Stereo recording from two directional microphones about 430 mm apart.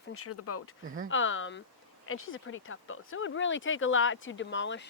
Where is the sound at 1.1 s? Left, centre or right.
Left.